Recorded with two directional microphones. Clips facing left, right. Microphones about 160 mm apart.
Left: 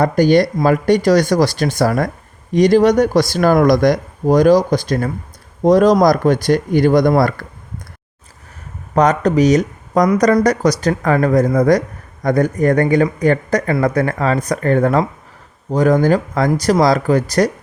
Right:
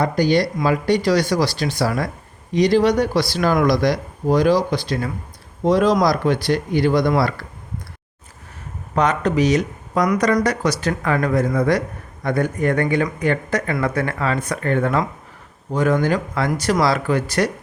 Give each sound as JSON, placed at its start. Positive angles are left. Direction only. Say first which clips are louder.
{"t": 0.0, "sound": "speech", "louder": "left 5 dB", "side_deg": 50}
{"t": 9.0, "sound": "speech", "louder": "left 5 dB", "side_deg": 40}